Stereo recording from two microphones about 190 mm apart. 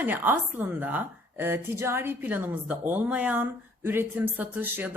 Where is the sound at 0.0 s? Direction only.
10° right (ahead or behind).